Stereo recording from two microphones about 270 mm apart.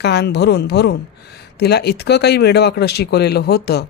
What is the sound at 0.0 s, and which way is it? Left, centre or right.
Speech, left.